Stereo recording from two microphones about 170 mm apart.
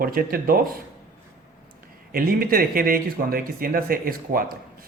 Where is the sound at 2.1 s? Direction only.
60° right (ahead or behind).